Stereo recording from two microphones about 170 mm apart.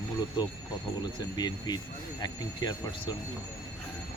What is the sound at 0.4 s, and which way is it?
Speech, 25° left (ahead or behind).